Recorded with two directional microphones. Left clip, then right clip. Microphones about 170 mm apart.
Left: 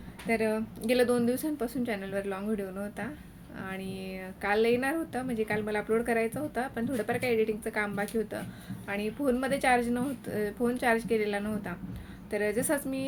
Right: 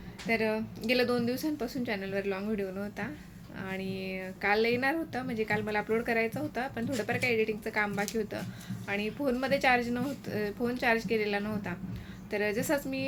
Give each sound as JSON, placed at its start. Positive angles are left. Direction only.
{"t": 0.3, "sound": "a woman's voice", "side_deg": 5}